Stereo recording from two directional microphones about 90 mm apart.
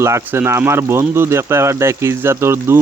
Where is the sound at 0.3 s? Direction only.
30° right (ahead or behind).